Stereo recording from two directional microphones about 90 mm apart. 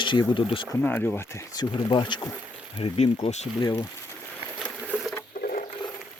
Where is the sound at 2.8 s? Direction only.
90° left.